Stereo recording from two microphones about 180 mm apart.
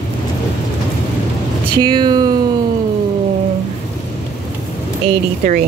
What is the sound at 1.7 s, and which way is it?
Speech, 25° right (ahead or behind).